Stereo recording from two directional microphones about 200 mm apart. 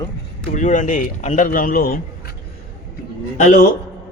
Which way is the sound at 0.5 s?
40° left (ahead or behind).